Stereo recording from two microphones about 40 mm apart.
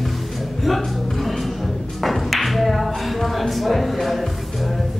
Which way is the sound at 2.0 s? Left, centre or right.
Centre.